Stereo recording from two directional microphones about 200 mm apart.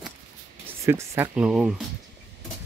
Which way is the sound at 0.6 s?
15° right (ahead or behind).